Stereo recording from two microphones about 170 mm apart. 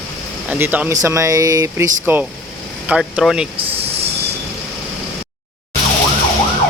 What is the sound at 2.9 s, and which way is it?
Speech, 5° right (ahead or behind).